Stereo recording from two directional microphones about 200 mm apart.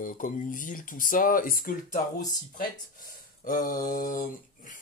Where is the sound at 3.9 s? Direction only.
45° left (ahead or behind).